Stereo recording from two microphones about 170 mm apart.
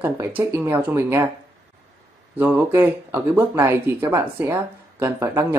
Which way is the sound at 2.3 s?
10° right (ahead or behind).